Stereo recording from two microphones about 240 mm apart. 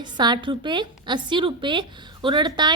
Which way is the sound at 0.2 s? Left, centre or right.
Centre.